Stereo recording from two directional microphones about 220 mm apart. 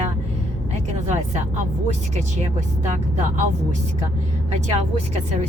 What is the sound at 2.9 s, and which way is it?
Speech, 35° right (ahead or behind).